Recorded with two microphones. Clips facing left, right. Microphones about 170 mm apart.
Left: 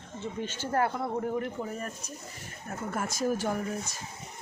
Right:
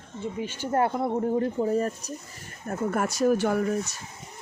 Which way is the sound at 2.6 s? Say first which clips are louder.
Right 7 dB; 55° right (ahead or behind).